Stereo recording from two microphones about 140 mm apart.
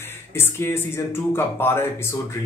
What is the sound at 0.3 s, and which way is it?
Speech, 20° left (ahead or behind).